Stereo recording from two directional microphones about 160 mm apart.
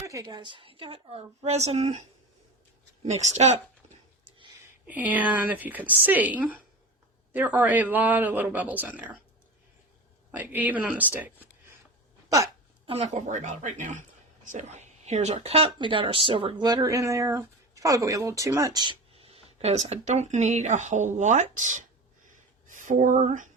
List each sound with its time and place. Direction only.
0.0 s speech: 20° right (ahead or behind); by 2.0 s 45° right (ahead or behind)
3.2 s speech: 45° right (ahead or behind)
4.6 s a woman's voice: 10° right (ahead or behind)
10.3 s a woman's voice: 10° right (ahead or behind)
12.8 s speech: 40° right (ahead or behind)
22.3 s a sound: 55° right (ahead or behind)